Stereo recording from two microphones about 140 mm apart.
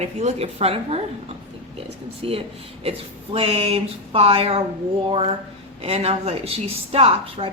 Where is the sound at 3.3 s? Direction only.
45° right (ahead or behind).